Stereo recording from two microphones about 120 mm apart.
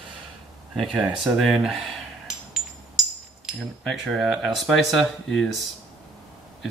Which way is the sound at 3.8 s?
Centre (ahead or behind).